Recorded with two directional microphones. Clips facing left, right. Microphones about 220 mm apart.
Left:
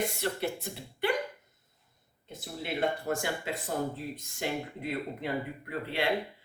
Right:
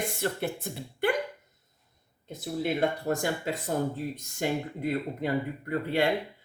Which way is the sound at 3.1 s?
40° right (ahead or behind).